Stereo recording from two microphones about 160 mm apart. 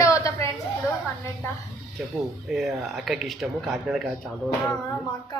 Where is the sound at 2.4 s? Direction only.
Centre (ahead or behind).